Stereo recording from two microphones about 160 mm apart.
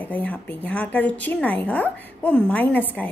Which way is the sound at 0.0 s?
10° left (ahead or behind).